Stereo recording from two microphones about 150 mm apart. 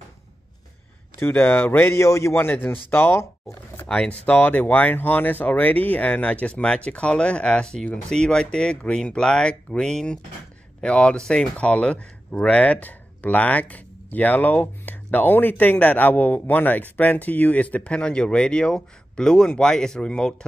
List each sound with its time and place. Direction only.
1.2 s speech: 15° left (ahead or behind)